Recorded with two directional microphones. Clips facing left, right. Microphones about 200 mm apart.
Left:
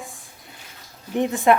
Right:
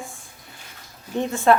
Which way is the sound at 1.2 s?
15° left (ahead or behind).